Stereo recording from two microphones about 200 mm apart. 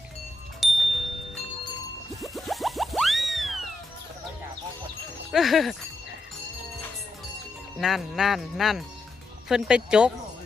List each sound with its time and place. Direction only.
0.6 s music: centre (ahead or behind)
2.2 s music: centre (ahead or behind)
5.3 s speech: centre (ahead or behind)
7.8 s speech: centre (ahead or behind)